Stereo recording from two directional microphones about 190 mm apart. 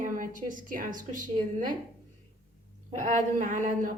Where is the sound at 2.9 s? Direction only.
40° right (ahead or behind).